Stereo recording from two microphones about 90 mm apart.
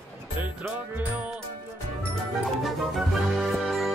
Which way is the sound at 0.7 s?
15° right (ahead or behind).